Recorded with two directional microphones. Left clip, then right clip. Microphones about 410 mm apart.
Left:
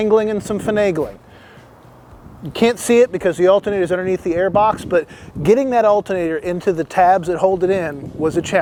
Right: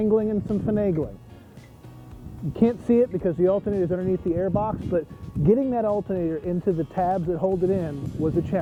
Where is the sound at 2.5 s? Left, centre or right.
Centre.